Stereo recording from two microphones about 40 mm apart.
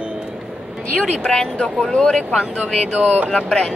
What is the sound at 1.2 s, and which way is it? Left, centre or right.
Speech, centre.